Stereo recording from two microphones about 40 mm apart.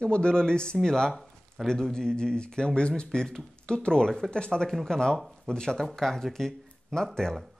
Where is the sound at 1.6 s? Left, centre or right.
Centre.